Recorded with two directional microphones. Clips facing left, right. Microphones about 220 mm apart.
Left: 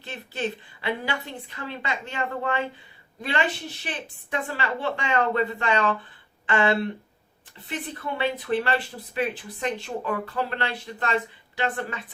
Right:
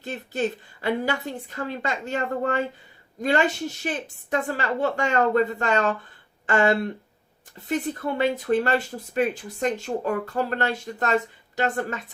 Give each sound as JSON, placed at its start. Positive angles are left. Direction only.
{"t": 0.0, "sound": "speech", "side_deg": -45}